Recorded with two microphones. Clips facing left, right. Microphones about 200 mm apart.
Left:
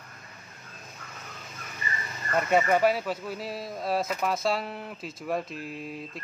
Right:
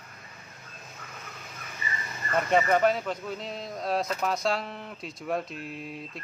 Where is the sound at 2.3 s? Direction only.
5° left (ahead or behind).